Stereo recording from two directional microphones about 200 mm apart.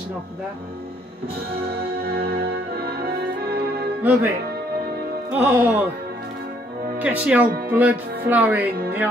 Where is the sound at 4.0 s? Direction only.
10° right (ahead or behind).